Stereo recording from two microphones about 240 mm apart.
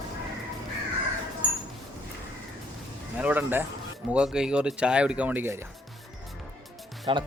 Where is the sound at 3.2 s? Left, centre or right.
Centre.